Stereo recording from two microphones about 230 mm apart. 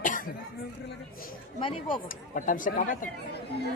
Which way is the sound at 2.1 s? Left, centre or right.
Left.